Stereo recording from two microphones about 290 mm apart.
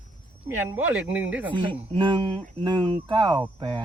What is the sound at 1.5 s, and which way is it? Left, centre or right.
Speech, centre.